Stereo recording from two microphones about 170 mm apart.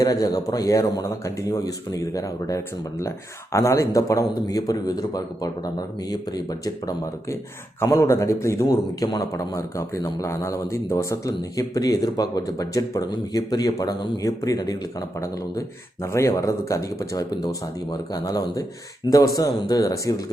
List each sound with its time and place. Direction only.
0.0 s a man's voice: 20° left (ahead or behind)
16.0 s a man's voice: 15° left (ahead or behind)